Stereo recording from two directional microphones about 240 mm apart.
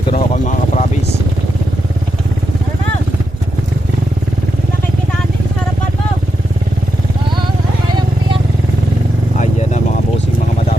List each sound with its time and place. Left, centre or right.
0.1 s speech: left
9.4 s vehicle: left